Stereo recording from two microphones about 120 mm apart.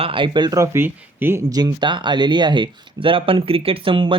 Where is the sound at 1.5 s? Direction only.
35° right (ahead or behind).